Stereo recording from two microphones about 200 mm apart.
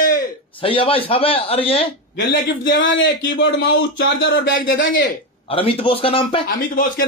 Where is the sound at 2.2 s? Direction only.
65° left (ahead or behind).